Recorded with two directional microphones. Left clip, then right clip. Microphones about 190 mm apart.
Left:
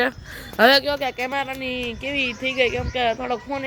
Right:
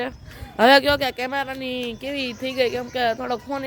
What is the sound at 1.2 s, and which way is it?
Speech, 20° right (ahead or behind).